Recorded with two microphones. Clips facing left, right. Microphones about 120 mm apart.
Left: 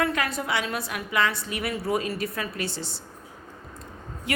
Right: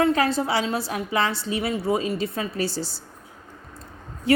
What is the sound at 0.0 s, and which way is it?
Speech, 30° right (ahead or behind).